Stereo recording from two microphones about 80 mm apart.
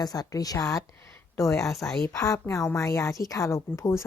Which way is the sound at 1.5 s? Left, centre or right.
Centre.